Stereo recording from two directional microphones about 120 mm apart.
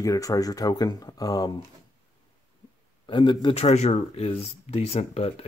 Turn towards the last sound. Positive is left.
turn(degrees=60)  # may be behind; listen again after turning